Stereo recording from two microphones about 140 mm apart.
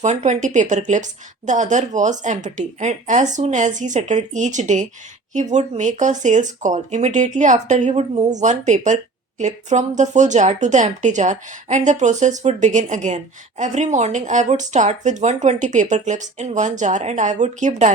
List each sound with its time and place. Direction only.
0.0 s speech: 55° right (ahead or behind)